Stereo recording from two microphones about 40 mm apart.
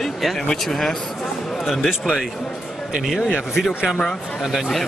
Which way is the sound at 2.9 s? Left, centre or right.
Centre.